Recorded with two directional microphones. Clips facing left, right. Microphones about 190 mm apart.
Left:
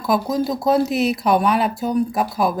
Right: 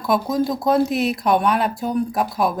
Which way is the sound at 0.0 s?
Centre (ahead or behind).